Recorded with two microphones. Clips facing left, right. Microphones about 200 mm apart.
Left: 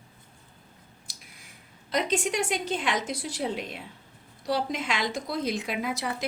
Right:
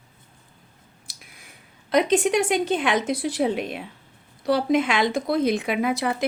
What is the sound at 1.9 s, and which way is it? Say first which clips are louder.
Speech: right 8 dB; 60° right (ahead or behind).